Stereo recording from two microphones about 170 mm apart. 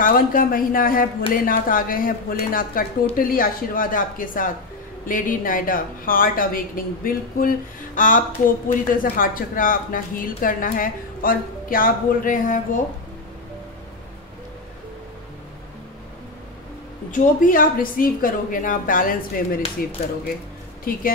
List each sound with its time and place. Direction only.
0.0 s a woman's voice: 55° left (ahead or behind)
17.1 s a woman's voice: 50° left (ahead or behind)
20.9 s a woman's voice: 60° left (ahead or behind)